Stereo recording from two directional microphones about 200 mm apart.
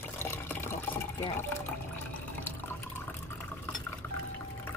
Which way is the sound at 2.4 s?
10° left (ahead or behind).